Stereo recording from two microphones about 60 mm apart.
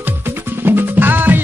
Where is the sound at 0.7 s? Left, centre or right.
Right.